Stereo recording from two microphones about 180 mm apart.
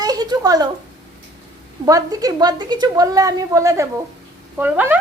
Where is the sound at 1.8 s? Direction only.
20° right (ahead or behind).